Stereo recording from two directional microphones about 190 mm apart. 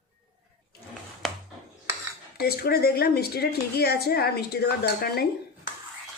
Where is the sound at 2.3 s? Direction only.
55° left (ahead or behind).